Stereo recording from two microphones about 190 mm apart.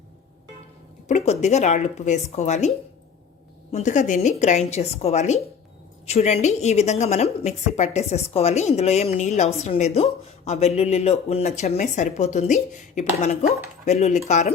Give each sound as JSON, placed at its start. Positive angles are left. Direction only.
{"t": 1.0, "sound": "a woman's voice", "side_deg": 35}